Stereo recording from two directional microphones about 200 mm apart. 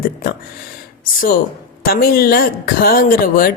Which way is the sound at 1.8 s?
50° left (ahead or behind).